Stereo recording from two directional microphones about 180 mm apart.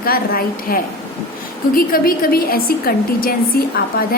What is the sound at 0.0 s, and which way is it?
A woman's voice, 55° left (ahead or behind).